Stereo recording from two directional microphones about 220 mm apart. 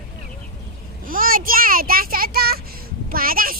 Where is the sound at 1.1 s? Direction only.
40° right (ahead or behind).